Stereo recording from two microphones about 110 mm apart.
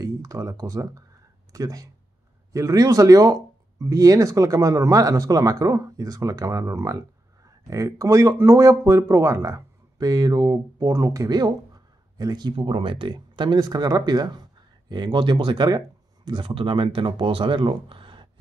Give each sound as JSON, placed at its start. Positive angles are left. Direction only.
{"t": 0.0, "sound": "speech", "side_deg": -30}
{"t": 12.5, "sound": "speech", "side_deg": -50}